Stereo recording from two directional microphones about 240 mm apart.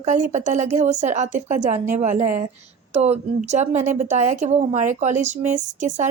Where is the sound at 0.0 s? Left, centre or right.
Right.